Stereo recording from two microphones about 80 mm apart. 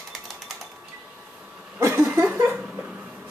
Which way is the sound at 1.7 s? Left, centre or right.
Right.